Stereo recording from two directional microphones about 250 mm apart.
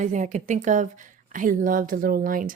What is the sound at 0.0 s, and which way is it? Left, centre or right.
A woman's voice, right.